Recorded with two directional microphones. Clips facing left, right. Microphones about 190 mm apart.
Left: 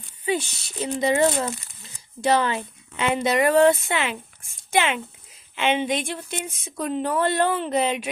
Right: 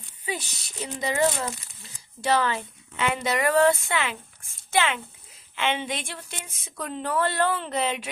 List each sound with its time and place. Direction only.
0.3 s a woman's voice: 25° left (ahead or behind)